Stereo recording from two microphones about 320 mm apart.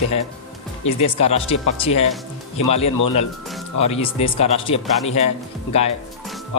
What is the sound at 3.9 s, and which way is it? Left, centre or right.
A man's voice, centre.